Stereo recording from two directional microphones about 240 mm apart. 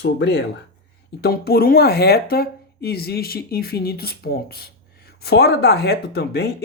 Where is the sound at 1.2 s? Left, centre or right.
Left.